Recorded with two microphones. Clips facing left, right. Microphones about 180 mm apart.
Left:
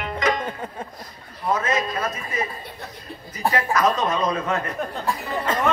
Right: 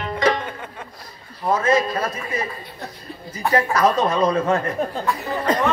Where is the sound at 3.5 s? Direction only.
30° right (ahead or behind).